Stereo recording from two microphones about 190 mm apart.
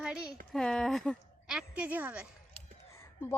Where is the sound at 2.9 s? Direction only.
15° left (ahead or behind).